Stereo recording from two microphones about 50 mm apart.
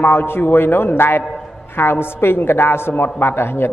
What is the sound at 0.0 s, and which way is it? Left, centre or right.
A man's voice, left.